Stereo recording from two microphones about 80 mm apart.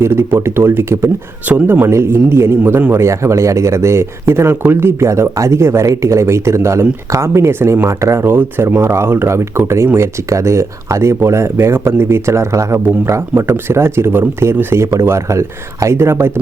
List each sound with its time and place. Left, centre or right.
0.0 s speech: right
1.5 s speech: centre
1.9 s speech: right